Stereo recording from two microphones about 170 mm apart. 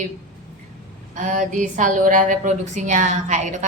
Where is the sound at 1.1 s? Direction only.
50° right (ahead or behind).